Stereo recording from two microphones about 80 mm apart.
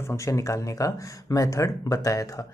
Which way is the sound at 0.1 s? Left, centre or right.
Left.